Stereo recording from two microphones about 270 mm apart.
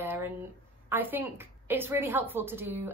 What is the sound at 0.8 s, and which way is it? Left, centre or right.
A woman's voice, centre.